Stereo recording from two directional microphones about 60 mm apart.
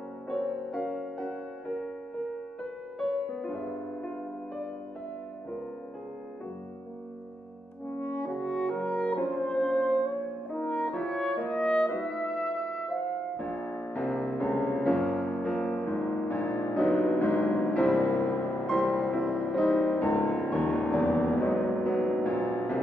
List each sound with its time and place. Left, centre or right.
0.3 s music: centre
3.0 s music: centre
8.0 s french horn: left
12.2 s music: centre
13.4 s music: left
14.8 s music: centre
15.8 s music: left
16.7 s music: centre
20.0 s music: left
20.5 s music: centre
22.3 s music: left